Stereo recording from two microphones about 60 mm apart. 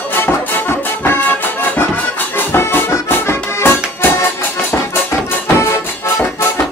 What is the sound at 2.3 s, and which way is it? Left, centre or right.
Accordion, left.